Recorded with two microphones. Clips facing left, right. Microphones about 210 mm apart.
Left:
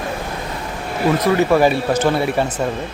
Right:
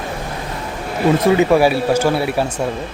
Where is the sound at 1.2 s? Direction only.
20° right (ahead or behind).